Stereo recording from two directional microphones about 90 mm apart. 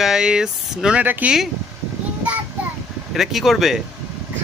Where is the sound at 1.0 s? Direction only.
20° right (ahead or behind).